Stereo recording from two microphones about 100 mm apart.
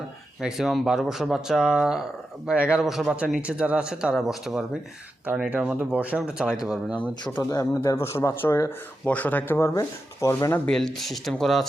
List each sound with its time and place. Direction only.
0.4 s a man's voice: 5° right (ahead or behind)
5.2 s a man's voice: 15° right (ahead or behind)
7.5 s speech: 30° left (ahead or behind)
10.7 s speech: 5° left (ahead or behind)